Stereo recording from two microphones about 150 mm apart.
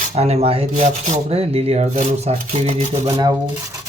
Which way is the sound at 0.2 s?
40° right (ahead or behind).